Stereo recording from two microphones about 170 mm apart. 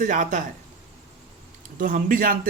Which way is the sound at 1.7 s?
55° right (ahead or behind).